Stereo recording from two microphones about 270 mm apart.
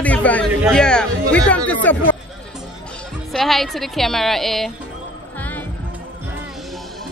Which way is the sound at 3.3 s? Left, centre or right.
Centre.